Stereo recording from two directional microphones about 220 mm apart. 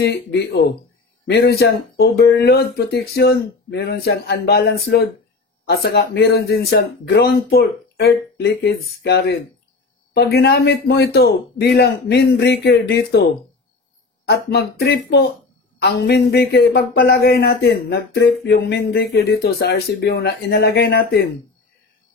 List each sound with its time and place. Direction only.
0.0 s speech: 50° left (ahead or behind)